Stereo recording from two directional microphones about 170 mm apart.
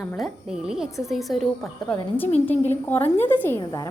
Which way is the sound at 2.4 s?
10° left (ahead or behind).